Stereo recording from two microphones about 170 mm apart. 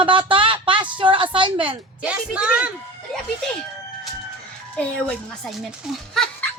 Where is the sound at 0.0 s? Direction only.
30° right (ahead or behind).